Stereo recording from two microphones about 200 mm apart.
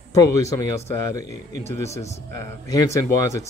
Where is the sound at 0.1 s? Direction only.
15° left (ahead or behind).